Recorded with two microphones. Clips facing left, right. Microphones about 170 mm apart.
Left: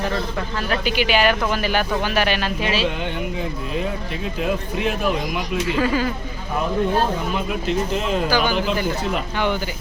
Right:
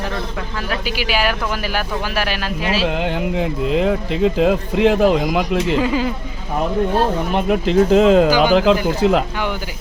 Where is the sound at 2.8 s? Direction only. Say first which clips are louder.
Right 4 dB; 90° right; by 5.5 s 75° right (ahead or behind).